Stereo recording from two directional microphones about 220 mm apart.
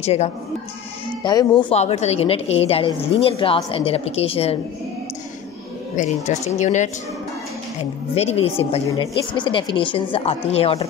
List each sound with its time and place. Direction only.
0.0 s a woman's voice: 30° left (ahead or behind)
1.2 s speech: 20° left (ahead or behind)
1.6 s a woman's voice: 30° left (ahead or behind)
5.9 s speech: 30° left (ahead or behind)
8.1 s a woman's voice: 25° left (ahead or behind)